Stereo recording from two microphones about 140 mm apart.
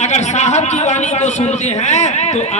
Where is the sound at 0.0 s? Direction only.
55° left (ahead or behind).